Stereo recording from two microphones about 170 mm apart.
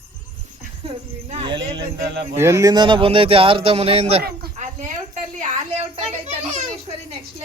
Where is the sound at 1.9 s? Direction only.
70° right (ahead or behind).